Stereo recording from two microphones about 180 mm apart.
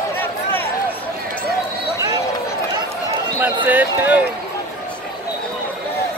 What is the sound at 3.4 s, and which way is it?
Basketball bounce, 10° right (ahead or behind).